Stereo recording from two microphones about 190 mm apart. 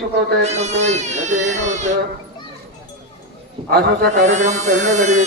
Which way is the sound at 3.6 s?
55° right (ahead or behind).